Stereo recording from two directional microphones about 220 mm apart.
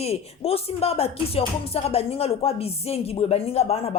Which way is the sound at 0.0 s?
30° left (ahead or behind).